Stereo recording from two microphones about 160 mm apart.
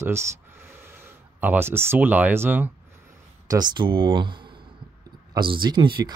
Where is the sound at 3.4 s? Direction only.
25° right (ahead or behind).